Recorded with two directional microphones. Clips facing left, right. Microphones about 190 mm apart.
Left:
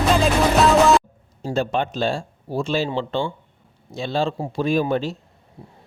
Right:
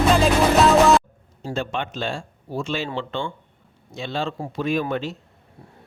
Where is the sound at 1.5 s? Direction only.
35° left (ahead or behind).